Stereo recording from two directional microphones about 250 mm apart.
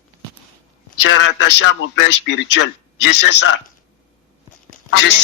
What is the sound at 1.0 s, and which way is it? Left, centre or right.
A man's voice, left.